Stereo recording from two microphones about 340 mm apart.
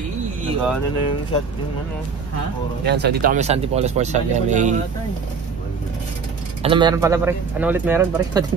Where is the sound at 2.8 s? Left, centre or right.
Right.